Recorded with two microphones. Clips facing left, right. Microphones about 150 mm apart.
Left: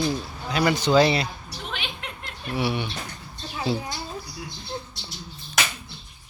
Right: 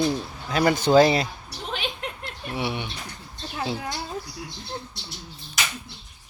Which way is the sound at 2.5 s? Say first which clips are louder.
Left 3 dB; 20° right (ahead or behind).